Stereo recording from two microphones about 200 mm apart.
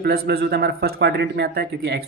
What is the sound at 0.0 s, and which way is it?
Speech, 50° right (ahead or behind).